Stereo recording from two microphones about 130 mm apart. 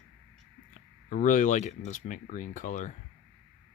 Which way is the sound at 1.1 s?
85° left.